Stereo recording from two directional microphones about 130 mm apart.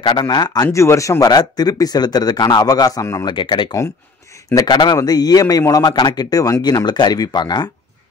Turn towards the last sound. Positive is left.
turn(degrees=35)  # may be behind; listen again after turning